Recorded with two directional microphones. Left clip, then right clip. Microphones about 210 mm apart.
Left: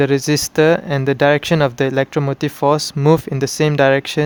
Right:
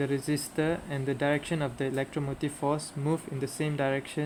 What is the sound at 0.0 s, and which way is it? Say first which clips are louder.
Speech: left 15 dB; 45° left (ahead or behind).